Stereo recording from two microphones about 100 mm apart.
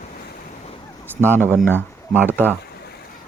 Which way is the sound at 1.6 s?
20° left (ahead or behind).